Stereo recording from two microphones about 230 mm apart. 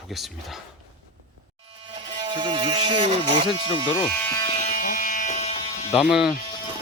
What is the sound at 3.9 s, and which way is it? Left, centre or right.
Speech, centre.